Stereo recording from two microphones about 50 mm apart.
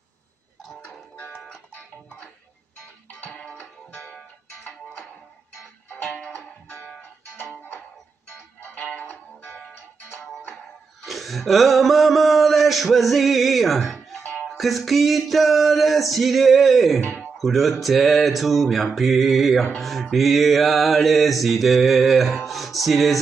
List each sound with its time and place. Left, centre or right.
1.1 s music: left
3.5 s music: left
6.3 s music: left
8.6 s music: left
11.1 s a sound: centre
13.7 s music: centre
14.3 s music: centre
14.6 s music: centre
17.0 s music: left
17.4 s music: centre